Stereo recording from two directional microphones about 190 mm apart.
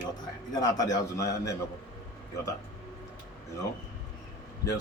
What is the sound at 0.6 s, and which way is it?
Speech, 20° left (ahead or behind).